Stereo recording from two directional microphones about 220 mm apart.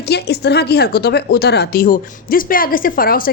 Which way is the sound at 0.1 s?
45° left (ahead or behind).